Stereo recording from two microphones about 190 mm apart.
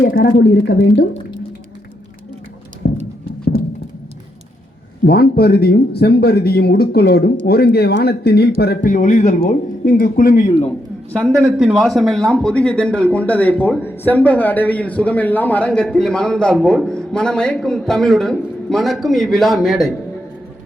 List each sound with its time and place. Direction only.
2.8 s music: 65° left (ahead or behind)
5.0 s speech: 55° left (ahead or behind)
11.1 s a man's voice: 5° left (ahead or behind)